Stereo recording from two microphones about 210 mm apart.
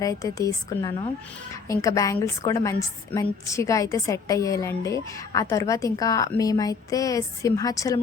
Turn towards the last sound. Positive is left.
turn(degrees=15)  # may be behind; listen again after turning